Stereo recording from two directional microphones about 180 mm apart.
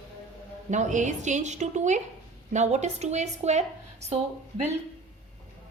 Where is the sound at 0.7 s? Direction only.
40° right (ahead or behind).